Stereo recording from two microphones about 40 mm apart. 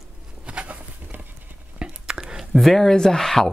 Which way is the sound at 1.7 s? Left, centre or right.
Right.